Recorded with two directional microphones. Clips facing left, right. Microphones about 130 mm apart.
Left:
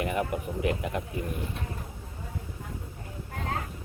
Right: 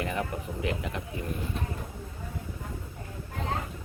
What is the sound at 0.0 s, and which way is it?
Speech, 20° left (ahead or behind).